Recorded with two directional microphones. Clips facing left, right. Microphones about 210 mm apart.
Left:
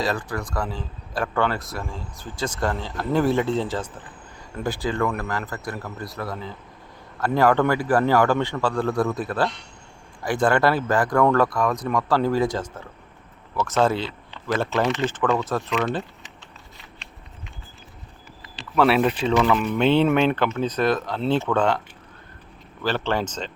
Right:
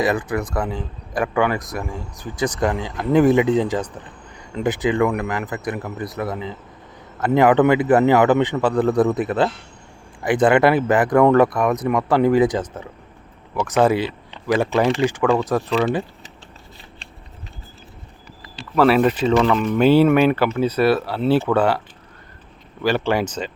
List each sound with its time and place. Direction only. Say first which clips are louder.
0.0 s speech: right 6 dB; 20° right (ahead or behind)
18.8 s speech: right 4 dB; centre (ahead or behind)
22.8 s speech: right 5 dB; 10° right (ahead or behind)